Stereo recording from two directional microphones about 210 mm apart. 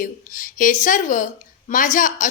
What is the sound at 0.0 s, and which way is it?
A woman's voice, 40° left (ahead or behind).